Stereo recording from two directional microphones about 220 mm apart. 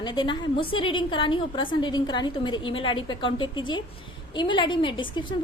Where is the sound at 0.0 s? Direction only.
20° left (ahead or behind).